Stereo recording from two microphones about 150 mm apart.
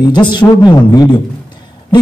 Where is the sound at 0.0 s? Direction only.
30° left (ahead or behind).